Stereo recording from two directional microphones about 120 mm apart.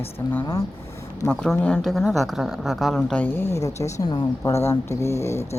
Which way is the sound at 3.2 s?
20° left (ahead or behind).